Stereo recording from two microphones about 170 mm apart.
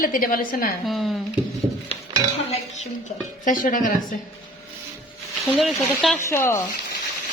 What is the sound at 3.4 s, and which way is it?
Speech, 50° left (ahead or behind).